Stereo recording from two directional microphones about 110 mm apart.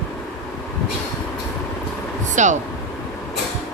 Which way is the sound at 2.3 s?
90° right.